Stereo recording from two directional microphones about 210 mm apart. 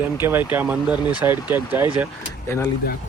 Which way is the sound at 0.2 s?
10° right (ahead or behind).